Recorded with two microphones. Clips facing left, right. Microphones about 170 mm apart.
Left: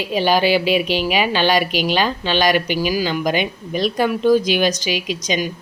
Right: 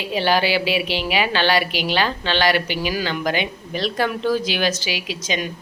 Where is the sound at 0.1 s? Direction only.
15° left (ahead or behind).